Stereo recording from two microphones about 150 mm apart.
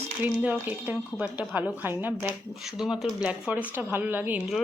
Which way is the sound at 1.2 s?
10° right (ahead or behind).